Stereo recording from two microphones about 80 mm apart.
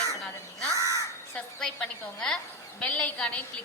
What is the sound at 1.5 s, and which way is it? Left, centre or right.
A woman's voice, centre.